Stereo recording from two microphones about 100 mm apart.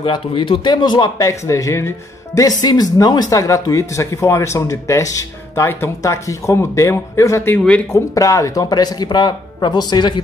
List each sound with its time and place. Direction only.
0.0 s speech: 55° left (ahead or behind)
1.1 s speech: 35° left (ahead or behind)
7.5 s speech: 10° left (ahead or behind)
7.9 s speech: 35° left (ahead or behind); by 10.2 s 50° left (ahead or behind)